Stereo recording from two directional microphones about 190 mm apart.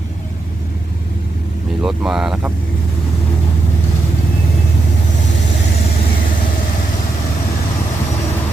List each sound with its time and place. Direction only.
1.8 s speech: 5° right (ahead or behind)